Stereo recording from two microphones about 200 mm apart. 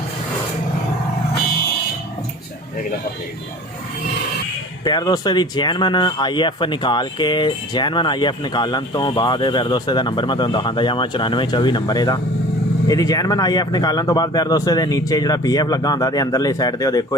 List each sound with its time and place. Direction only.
4.8 s speech: 20° left (ahead or behind)